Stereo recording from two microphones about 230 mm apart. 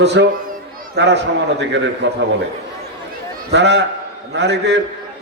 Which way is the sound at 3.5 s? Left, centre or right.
Right.